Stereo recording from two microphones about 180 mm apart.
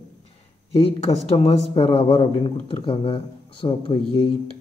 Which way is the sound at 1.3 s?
35° left (ahead or behind).